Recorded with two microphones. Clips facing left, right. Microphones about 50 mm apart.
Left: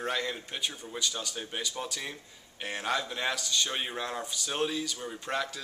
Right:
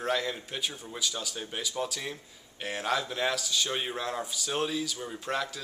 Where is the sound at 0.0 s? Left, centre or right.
Centre.